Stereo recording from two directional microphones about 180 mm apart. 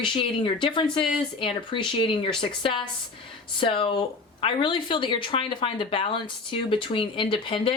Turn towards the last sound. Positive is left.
turn(degrees=30)  # may be behind; listen again after turning